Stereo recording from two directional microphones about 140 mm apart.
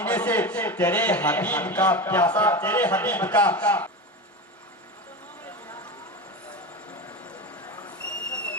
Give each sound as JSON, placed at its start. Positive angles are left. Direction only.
{"t": 0.0, "sound": "a man's voice", "side_deg": 10}
{"t": 8.0, "sound": "owl", "side_deg": 10}